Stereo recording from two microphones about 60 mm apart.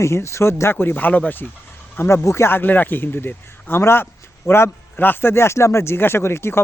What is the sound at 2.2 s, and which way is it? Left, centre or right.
A man's voice, left.